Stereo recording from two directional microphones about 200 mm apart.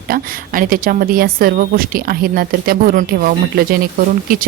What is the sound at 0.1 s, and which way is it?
A woman's voice, 45° right (ahead or behind).